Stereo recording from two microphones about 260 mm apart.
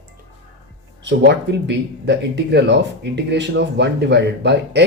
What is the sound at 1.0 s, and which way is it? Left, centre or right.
Speech, right.